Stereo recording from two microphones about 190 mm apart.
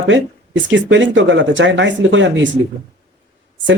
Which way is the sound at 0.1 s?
80° right.